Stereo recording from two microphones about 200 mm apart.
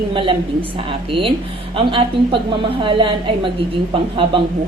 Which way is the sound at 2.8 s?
25° right (ahead or behind).